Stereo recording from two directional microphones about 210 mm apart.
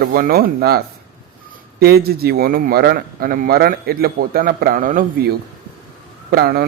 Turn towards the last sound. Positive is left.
turn(degrees=-45)  # may be behind; listen again after turning